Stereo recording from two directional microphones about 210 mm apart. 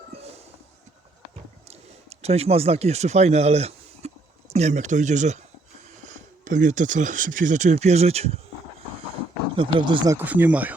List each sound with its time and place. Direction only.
1.6 s speech: 30° right (ahead or behind)
9.6 s speech: 25° right (ahead or behind)
10.2 s speech: 10° right (ahead or behind)